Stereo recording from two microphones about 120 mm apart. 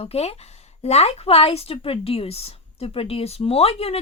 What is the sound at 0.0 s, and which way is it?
A woman's voice, 60° left (ahead or behind).